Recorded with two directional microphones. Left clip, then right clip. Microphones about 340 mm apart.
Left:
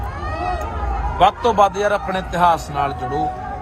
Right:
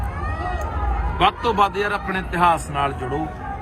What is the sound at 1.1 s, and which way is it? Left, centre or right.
A man's voice, left.